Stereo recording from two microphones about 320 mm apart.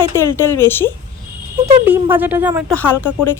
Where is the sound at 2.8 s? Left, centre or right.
Centre.